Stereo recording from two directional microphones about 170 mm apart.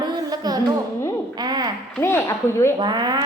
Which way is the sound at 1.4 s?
25° right (ahead or behind).